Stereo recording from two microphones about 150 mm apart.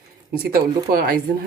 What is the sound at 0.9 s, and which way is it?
Speech, 85° right.